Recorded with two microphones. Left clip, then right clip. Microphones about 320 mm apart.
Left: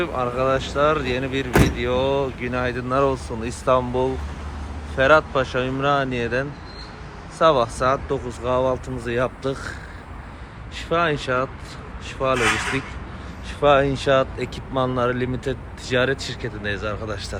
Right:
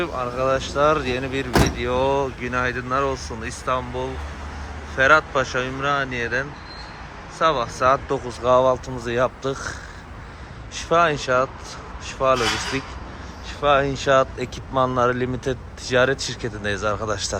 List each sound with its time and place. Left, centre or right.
0.0 s speech: centre
10.8 s speech: centre